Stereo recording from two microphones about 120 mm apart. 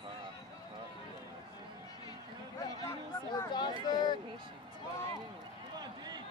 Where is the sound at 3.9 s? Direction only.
40° left (ahead or behind).